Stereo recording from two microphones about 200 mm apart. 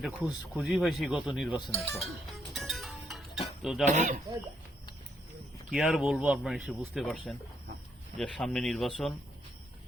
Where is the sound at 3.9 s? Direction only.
40° right (ahead or behind).